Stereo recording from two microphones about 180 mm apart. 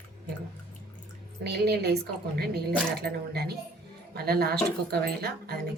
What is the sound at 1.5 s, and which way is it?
Speech, 65° right (ahead or behind).